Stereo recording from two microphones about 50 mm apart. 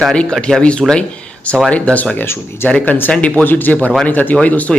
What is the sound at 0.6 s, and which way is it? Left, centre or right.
Speech, left.